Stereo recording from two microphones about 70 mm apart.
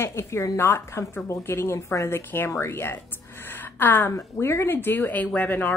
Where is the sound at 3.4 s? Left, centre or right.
Left.